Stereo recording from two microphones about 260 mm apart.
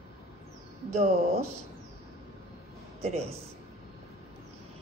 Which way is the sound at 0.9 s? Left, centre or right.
Right.